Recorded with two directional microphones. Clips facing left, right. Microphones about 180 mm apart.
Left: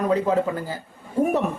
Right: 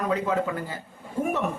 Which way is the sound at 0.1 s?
35° left (ahead or behind).